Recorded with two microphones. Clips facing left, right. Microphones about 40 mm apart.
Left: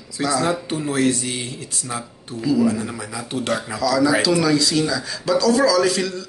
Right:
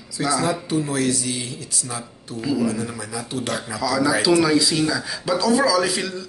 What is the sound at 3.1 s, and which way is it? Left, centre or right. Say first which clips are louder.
Speech: left 1 dB; left.